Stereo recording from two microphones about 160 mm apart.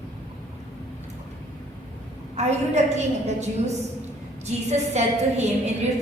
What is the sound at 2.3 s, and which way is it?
A woman's voice, 45° right (ahead or behind).